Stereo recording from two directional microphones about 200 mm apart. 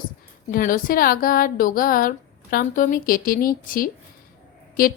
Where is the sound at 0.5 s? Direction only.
45° left (ahead or behind).